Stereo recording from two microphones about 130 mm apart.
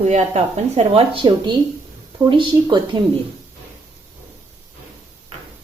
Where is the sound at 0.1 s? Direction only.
65° right (ahead or behind); by 2.8 s 35° right (ahead or behind).